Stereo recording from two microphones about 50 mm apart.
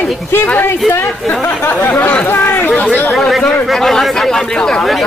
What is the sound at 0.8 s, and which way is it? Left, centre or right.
Speech, centre.